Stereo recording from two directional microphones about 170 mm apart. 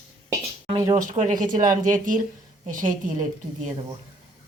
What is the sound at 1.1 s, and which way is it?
Speech, 50° right (ahead or behind).